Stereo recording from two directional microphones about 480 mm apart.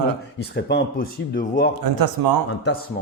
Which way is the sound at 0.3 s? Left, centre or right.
Centre.